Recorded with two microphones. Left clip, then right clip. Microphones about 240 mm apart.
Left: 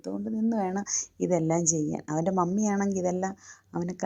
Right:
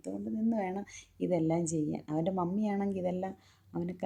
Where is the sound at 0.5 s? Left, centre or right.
Left.